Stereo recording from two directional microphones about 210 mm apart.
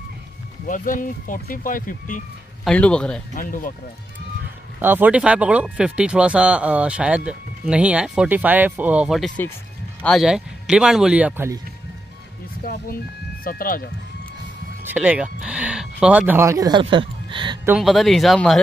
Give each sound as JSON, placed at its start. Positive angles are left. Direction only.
{"t": 0.7, "sound": "speech", "side_deg": 40}
{"t": 2.6, "sound": "speech", "side_deg": 5}
{"t": 3.3, "sound": "speech", "side_deg": 40}
{"t": 4.8, "sound": "speech", "side_deg": -10}
{"t": 13.4, "sound": "speech", "side_deg": 45}
{"t": 14.9, "sound": "speech", "side_deg": -5}
{"t": 17.6, "sound": "speech", "side_deg": 0}